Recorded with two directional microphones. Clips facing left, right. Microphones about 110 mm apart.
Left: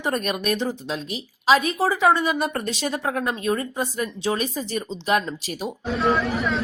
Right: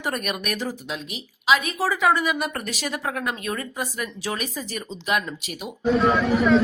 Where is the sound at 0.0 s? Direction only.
30° left (ahead or behind).